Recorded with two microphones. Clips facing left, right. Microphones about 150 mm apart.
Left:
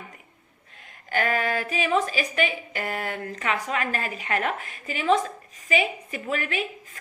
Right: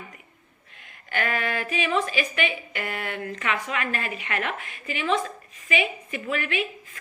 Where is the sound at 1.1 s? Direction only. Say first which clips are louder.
Left 3 dB; 40° left (ahead or behind).